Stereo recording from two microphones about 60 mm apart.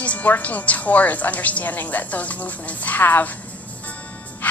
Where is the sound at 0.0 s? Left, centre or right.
Left.